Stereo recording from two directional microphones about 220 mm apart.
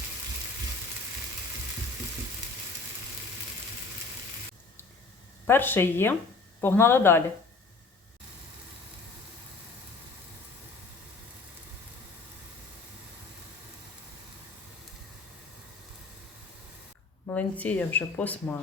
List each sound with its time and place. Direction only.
5.5 s speech: 10° left (ahead or behind)
17.2 s speech: 5° left (ahead or behind)